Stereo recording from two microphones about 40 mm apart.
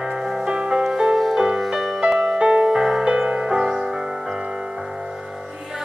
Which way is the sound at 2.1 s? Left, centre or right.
Right.